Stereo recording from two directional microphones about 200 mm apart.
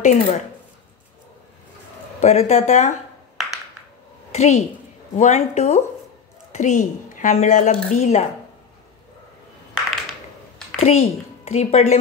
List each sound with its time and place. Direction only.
0.0 s a woman's voice: 35° left (ahead or behind)
2.2 s a woman's voice: 35° left (ahead or behind)
4.3 s a woman's voice: 35° left (ahead or behind)
10.8 s a woman's voice: 35° left (ahead or behind)